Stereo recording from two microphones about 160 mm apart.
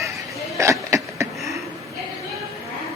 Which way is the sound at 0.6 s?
20° right (ahead or behind).